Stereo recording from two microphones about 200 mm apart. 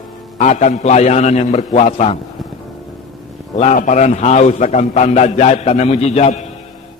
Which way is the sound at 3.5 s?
35° left (ahead or behind).